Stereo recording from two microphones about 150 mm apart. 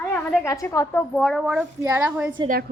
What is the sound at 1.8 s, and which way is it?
Speech, 15° right (ahead or behind).